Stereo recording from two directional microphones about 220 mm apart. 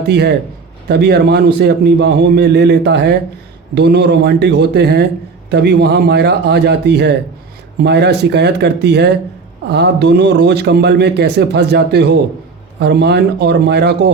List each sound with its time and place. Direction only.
0.1 s speech: 50° right (ahead or behind)